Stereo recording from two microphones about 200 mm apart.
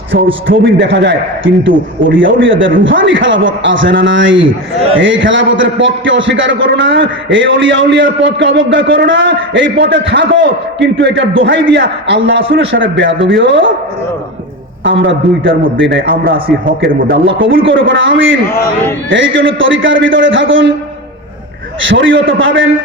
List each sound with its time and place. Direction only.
0.5 s a man's voice: 65° right (ahead or behind)
14.8 s a man's voice: 70° right (ahead or behind)
16.0 s a man's voice: 45° right (ahead or behind)
17.2 s a man's voice: 70° right (ahead or behind)
21.8 s a man's voice: 70° right (ahead or behind)